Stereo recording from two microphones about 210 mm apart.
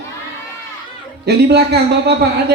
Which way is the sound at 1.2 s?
50° right (ahead or behind).